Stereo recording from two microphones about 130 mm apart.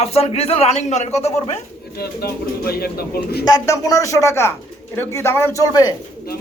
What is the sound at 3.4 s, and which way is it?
Speech, 25° left (ahead or behind).